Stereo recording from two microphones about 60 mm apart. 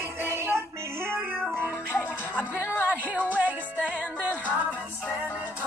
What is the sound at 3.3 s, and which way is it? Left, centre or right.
Music, right.